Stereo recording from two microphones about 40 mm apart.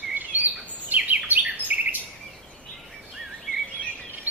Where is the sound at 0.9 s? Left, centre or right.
Right.